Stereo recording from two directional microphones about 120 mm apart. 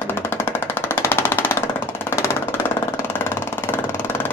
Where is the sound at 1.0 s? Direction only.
20° left (ahead or behind).